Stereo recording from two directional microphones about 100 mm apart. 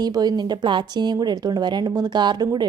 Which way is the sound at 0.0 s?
40° right (ahead or behind).